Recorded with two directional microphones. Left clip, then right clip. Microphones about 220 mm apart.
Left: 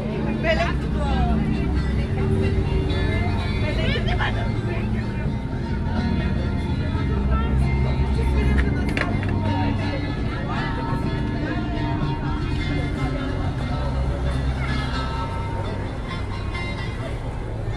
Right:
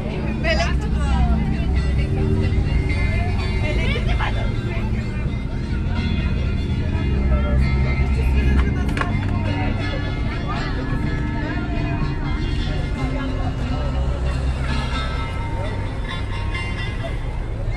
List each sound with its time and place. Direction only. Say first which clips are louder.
0.4 s vehicle: even; 35° left (ahead or behind)